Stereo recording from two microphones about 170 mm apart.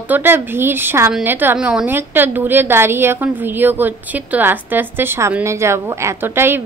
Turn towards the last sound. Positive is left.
turn(degrees=-15)  # may be behind; listen again after turning